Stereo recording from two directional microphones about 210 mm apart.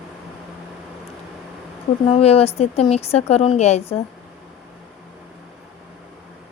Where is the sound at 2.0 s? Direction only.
25° left (ahead or behind).